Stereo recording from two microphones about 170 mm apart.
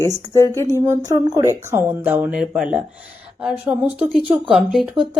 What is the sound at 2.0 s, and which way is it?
Speech, 10° right (ahead or behind).